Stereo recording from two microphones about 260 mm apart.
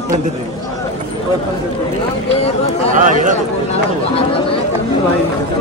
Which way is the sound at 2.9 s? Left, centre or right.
Right.